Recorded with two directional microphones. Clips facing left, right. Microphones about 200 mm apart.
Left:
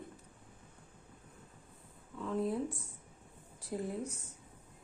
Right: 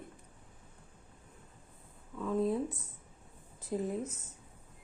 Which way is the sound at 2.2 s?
20° right (ahead or behind).